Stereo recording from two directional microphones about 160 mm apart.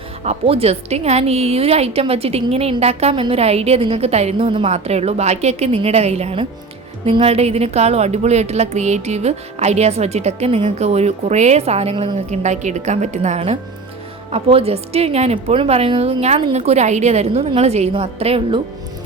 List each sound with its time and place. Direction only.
0.3 s a woman's voice: 40° right (ahead or behind)